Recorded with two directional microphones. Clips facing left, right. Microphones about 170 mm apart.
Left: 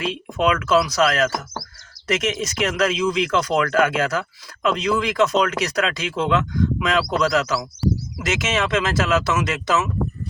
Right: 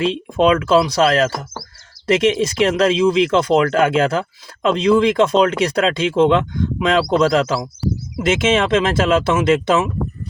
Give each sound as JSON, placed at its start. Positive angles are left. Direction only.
{"t": 0.0, "sound": "speech", "side_deg": -30}